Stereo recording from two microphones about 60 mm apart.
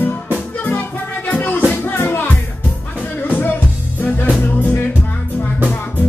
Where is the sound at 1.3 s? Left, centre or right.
Left.